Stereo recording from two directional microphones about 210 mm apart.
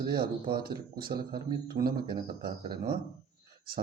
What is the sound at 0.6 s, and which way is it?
Mantra, 45° right (ahead or behind).